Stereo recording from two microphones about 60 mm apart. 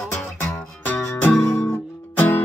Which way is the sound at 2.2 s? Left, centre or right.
Left.